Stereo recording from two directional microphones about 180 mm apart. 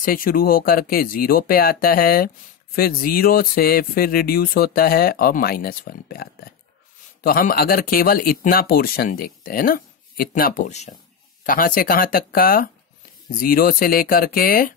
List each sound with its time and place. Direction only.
0.0 s speech: 50° left (ahead or behind)